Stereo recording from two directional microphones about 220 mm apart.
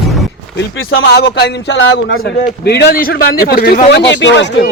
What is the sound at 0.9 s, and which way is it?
A man's voice, 50° left (ahead or behind).